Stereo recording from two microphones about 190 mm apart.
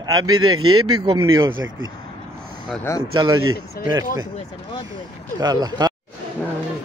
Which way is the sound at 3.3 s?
90° right.